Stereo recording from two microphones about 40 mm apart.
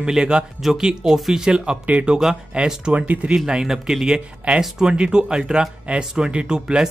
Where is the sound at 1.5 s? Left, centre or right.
Right.